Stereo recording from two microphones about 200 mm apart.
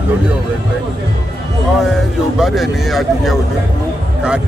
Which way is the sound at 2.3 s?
Centre (ahead or behind).